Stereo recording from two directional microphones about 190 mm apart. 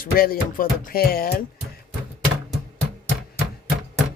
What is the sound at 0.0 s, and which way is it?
Music, 50° left (ahead or behind).